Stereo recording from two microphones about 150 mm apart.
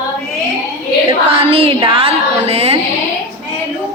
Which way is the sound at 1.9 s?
40° right (ahead or behind).